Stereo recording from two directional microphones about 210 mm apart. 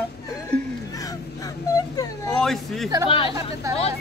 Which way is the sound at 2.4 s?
Centre (ahead or behind).